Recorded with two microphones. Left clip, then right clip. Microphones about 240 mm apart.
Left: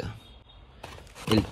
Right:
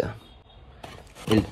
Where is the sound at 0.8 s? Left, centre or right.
Centre.